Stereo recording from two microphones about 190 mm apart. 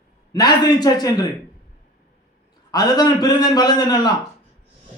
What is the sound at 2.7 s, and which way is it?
A man's voice, 20° left (ahead or behind).